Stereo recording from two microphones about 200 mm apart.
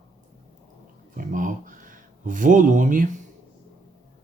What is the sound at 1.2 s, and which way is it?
Speech, 40° right (ahead or behind).